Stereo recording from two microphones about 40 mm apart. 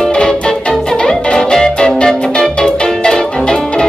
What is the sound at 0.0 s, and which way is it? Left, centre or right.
Music, left.